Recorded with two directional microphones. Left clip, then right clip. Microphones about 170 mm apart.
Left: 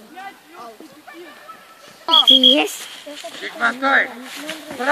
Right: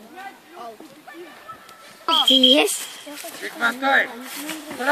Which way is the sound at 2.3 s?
50° right (ahead or behind).